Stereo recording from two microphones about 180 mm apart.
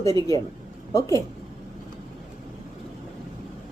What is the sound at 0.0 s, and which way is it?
Speech, 20° left (ahead or behind).